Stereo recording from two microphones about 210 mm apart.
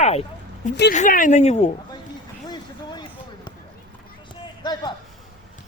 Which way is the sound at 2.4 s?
20° left (ahead or behind).